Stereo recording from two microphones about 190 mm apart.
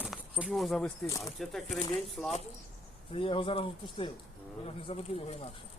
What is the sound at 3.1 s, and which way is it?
Speech, 30° left (ahead or behind).